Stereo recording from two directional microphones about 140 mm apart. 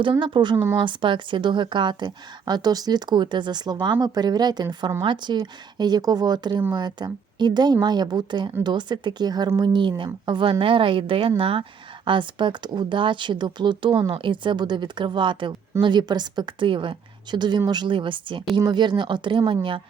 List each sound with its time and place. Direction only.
0.0 s a woman's voice: 35° right (ahead or behind)
0.5 s speech: 15° right (ahead or behind)
0.8 s a woman's voice: 35° right (ahead or behind)